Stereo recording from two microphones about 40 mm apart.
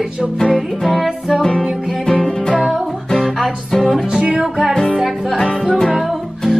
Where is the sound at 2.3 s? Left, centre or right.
Centre.